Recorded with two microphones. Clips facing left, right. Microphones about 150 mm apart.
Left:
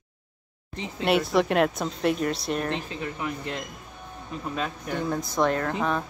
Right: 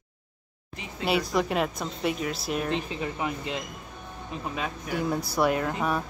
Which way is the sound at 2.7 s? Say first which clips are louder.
Right 1 dB; 15° right (ahead or behind).